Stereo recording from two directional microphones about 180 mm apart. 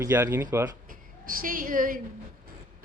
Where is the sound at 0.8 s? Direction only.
50° right (ahead or behind).